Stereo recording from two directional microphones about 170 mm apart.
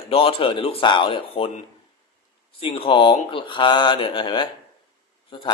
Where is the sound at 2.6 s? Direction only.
30° left (ahead or behind).